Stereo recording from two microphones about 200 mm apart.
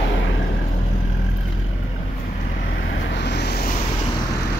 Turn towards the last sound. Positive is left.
turn(degrees=55)  # may be behind; listen again after turning